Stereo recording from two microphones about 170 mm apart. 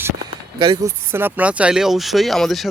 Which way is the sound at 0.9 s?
15° right (ahead or behind).